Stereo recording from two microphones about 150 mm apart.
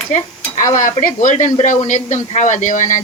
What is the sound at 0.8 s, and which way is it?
Speech, 60° left (ahead or behind).